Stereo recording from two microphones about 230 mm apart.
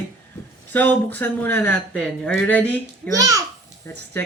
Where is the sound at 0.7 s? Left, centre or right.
Centre.